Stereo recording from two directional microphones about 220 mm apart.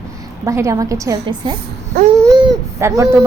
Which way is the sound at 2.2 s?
20° right (ahead or behind).